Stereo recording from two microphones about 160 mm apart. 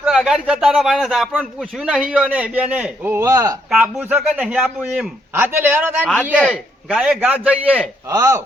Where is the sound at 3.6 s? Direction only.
5° right (ahead or behind).